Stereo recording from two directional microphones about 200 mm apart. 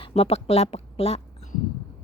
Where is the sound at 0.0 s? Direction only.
30° left (ahead or behind).